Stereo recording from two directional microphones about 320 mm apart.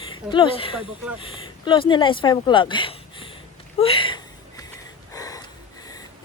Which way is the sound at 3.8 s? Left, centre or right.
Centre.